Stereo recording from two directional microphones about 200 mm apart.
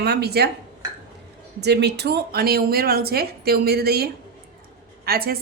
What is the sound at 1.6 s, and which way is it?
A woman's voice, 55° right (ahead or behind).